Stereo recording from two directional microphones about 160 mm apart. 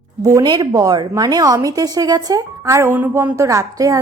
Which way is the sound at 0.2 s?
20° right (ahead or behind).